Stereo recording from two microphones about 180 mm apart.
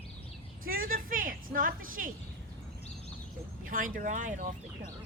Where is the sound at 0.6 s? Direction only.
50° right (ahead or behind).